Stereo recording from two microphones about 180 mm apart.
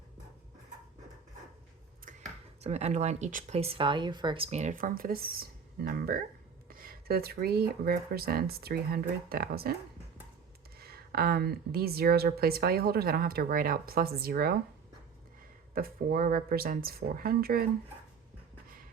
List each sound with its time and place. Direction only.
2.6 s speech: 40° right (ahead or behind); by 9.7 s 55° right (ahead or behind)
10.8 s speech: 60° right (ahead or behind)
15.7 s speech: 55° right (ahead or behind)